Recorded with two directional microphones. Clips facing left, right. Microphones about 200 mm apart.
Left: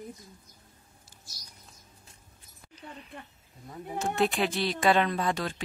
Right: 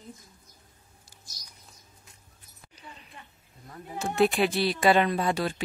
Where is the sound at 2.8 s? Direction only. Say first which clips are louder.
Left 4 dB; 55° left (ahead or behind).